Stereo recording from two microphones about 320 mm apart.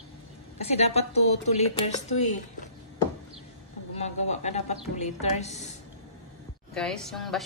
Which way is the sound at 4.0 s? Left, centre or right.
Left.